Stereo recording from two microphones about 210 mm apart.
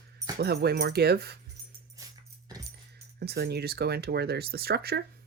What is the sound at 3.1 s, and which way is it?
Speech, 50° right (ahead or behind).